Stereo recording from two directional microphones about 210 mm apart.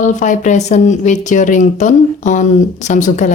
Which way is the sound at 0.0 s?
35° left (ahead or behind).